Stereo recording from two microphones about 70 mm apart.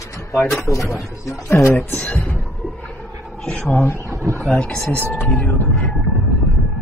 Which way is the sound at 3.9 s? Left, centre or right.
Right.